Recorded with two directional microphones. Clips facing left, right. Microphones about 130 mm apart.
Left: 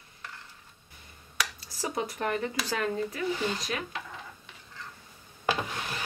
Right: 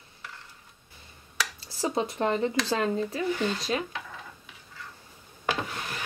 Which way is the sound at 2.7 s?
30° right (ahead or behind).